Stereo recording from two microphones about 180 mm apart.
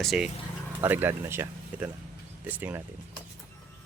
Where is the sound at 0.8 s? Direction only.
10° right (ahead or behind).